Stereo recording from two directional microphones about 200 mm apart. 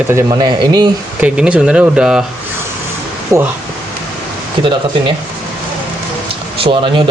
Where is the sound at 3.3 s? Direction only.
15° right (ahead or behind).